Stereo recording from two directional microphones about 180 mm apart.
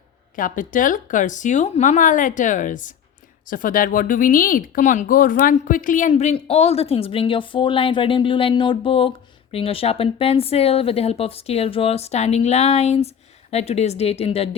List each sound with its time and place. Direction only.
0.3 s speech: 50° left (ahead or behind)